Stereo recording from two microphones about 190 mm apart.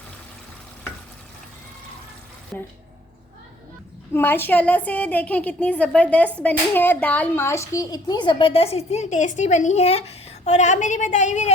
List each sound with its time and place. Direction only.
2.5 s a woman's voice: 10° left (ahead or behind)
4.1 s a woman's voice: 10° left (ahead or behind); by 11.5 s 40° left (ahead or behind)